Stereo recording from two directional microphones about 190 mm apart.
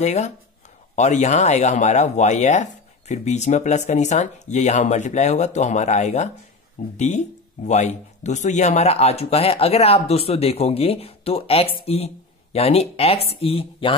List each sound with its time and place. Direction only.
0.0 s speech: 35° left (ahead or behind)